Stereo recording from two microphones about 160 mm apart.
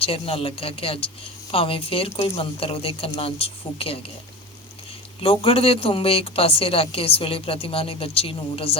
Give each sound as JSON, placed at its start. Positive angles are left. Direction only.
{"t": 0.0, "sound": "a woman's voice", "side_deg": 35}
{"t": 5.2, "sound": "a woman's voice", "side_deg": 35}